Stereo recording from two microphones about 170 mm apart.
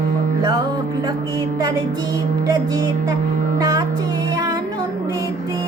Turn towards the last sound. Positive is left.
turn(degrees=-20)  # may be behind; listen again after turning